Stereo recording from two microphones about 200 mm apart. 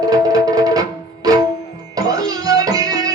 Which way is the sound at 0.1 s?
20° right (ahead or behind).